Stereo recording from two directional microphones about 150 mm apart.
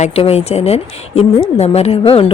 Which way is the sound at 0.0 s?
45° left (ahead or behind).